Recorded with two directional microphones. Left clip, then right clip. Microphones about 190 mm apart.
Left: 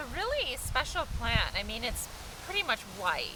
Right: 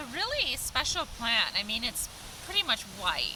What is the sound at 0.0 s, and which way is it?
Speech, 15° left (ahead or behind).